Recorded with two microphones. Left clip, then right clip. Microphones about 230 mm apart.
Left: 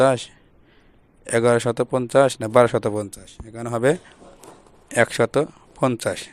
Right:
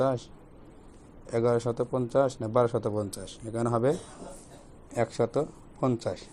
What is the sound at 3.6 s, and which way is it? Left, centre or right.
Speech, left.